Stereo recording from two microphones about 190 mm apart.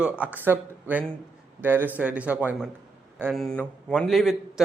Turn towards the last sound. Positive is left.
turn(degrees=0)  # may be behind; listen again after turning